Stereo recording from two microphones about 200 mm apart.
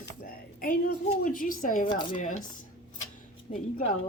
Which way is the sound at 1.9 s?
25° left (ahead or behind).